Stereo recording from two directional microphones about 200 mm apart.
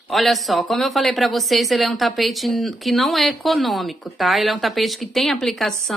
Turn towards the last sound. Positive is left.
turn(degrees=0)  # may be behind; listen again after turning